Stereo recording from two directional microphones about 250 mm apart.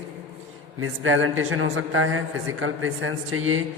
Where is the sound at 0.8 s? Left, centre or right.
Right.